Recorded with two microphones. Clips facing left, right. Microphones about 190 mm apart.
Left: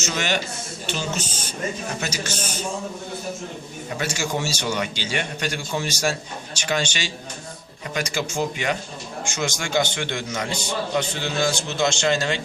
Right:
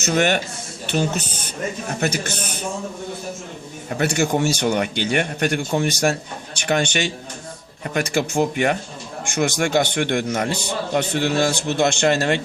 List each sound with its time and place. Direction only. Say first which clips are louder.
0.0 s a man's voice: right 6 dB; 55° right (ahead or behind)
3.8 s a man's voice: right 7 dB; 50° right (ahead or behind)